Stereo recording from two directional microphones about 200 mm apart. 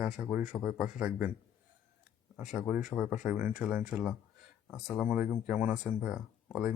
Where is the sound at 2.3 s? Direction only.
Centre (ahead or behind).